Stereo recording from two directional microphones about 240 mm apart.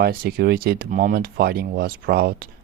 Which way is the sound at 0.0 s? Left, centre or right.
Right.